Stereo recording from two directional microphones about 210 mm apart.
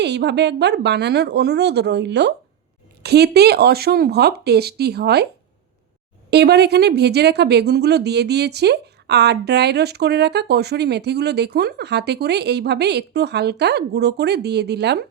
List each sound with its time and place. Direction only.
0.0 s a woman's voice: 55° right (ahead or behind)
6.3 s a woman's voice: 50° right (ahead or behind)